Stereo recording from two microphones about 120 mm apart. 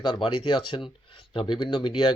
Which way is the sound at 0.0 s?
40° left (ahead or behind).